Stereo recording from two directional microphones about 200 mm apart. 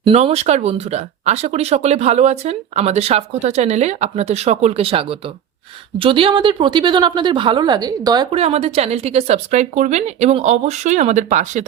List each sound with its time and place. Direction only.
0.0 s speech: 30° right (ahead or behind)